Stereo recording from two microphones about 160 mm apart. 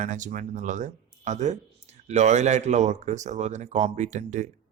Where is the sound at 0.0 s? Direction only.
50° right (ahead or behind).